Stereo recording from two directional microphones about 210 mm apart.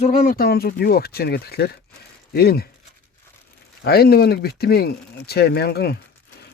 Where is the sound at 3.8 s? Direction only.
50° left (ahead or behind).